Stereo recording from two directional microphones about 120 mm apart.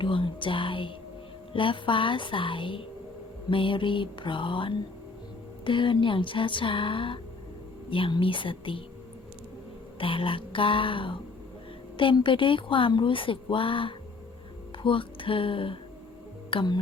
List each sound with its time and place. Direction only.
0.0 s speech: 45° left (ahead or behind)
10.0 s speech: 45° left (ahead or behind)
14.8 s music: 45° left (ahead or behind)
16.5 s speech: 45° left (ahead or behind)